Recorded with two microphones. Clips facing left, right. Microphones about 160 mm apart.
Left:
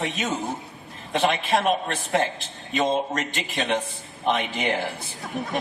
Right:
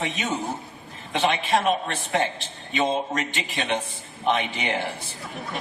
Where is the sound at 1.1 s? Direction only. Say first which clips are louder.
Left 1 dB; 40° left (ahead or behind).